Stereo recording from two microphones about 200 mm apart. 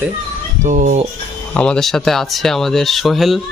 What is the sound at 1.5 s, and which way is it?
Speech, 5° left (ahead or behind).